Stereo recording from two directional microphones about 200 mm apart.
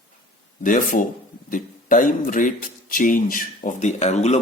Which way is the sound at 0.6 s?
40° left (ahead or behind).